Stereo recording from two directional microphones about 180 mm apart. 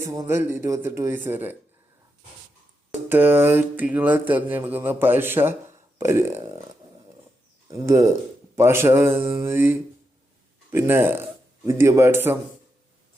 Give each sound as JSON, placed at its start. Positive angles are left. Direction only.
{"t": 0.0, "sound": "speech", "side_deg": -20}
{"t": 3.1, "sound": "speech", "side_deg": -10}
{"t": 7.7, "sound": "speech", "side_deg": -15}